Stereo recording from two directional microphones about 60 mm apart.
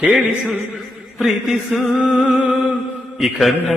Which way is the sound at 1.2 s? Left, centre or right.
Centre.